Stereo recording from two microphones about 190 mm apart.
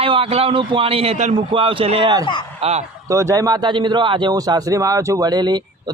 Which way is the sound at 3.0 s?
15° right (ahead or behind).